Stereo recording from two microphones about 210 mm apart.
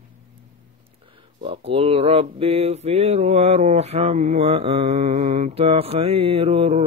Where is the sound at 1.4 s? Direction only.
25° right (ahead or behind).